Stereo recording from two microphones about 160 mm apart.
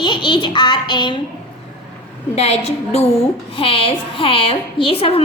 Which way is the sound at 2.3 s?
40° left (ahead or behind).